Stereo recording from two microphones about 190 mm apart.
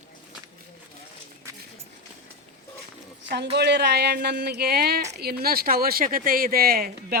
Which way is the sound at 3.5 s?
60° right (ahead or behind).